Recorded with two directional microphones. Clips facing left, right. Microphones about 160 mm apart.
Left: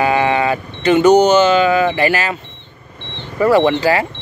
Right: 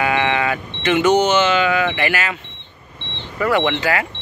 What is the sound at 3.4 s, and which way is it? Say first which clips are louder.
Speech: left 6 dB; 35° left (ahead or behind).